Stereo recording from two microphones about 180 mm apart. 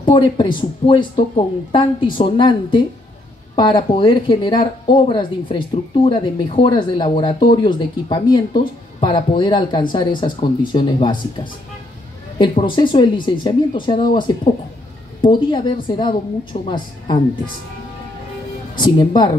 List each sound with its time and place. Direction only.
0.0 s speech: 25° left (ahead or behind)
18.9 s speech: 25° left (ahead or behind)